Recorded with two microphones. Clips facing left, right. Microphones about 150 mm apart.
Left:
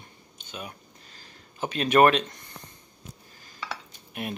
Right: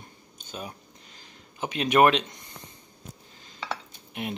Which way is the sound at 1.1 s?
15° right (ahead or behind).